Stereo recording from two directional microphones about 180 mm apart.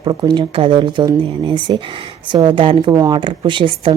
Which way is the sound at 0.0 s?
25° right (ahead or behind).